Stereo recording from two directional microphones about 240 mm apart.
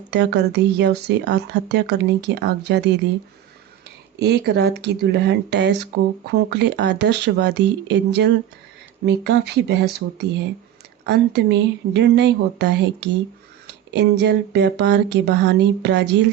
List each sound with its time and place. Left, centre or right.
0.1 s speech: right
4.2 s speech: right